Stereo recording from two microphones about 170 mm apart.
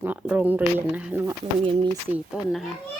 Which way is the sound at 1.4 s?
30° right (ahead or behind).